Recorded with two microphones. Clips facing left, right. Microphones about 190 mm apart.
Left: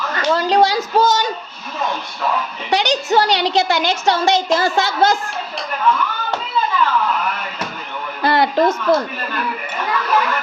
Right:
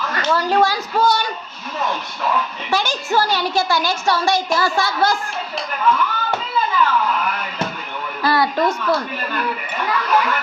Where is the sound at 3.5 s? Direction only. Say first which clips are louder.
Left 2 dB; 20° left (ahead or behind).